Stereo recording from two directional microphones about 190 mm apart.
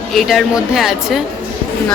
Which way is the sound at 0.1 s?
Centre (ahead or behind).